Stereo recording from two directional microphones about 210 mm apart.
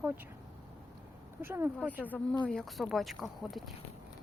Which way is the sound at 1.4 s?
10° right (ahead or behind).